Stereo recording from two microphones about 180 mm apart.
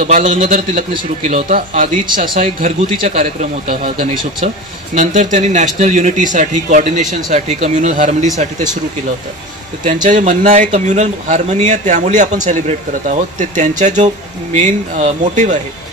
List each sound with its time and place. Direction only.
0.0 s a man's voice: 45° right (ahead or behind)
0.9 s speech: 35° right (ahead or behind)
1.5 s a man's voice: 45° right (ahead or behind)
10.0 s a man's voice: 40° right (ahead or behind)